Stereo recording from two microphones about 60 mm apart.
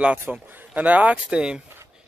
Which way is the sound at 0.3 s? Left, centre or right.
Right.